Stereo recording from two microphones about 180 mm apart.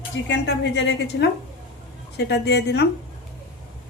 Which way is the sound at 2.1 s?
70° left (ahead or behind).